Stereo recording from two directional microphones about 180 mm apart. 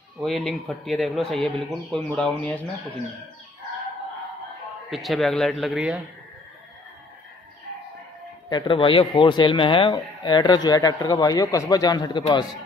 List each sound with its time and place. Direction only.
0.2 s speech: centre (ahead or behind)
4.8 s speech: centre (ahead or behind)
8.5 s a man's voice: 25° left (ahead or behind)